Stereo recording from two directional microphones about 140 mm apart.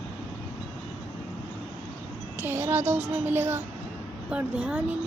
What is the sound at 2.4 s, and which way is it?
Child singing, 15° right (ahead or behind).